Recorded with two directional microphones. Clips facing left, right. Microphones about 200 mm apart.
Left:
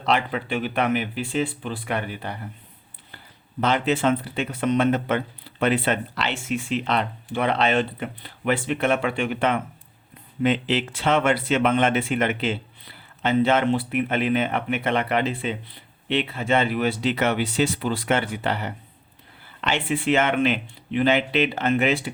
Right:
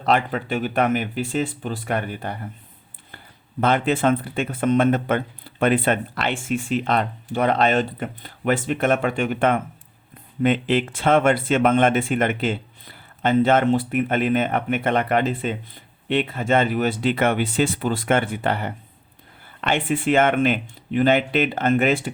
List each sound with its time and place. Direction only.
0.0 s speech: 45° right (ahead or behind)
3.6 s speech: 50° right (ahead or behind)